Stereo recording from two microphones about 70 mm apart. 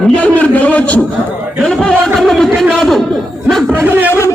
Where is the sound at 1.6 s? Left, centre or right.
Centre.